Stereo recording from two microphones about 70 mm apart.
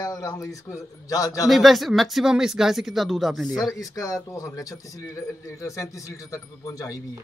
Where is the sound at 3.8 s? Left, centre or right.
Left.